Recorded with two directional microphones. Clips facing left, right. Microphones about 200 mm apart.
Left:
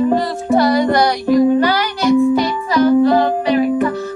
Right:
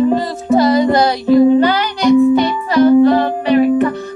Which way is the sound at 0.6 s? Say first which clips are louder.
Right 2 dB; 20° right (ahead or behind).